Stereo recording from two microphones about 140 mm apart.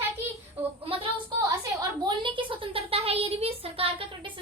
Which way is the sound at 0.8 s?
40° right (ahead or behind).